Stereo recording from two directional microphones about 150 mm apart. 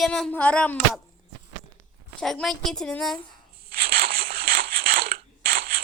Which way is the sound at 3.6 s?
90° right.